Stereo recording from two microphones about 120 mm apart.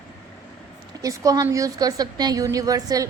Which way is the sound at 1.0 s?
30° right (ahead or behind).